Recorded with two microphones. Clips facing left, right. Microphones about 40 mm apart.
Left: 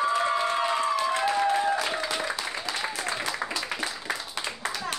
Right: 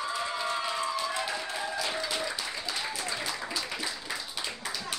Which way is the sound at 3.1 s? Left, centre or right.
Left.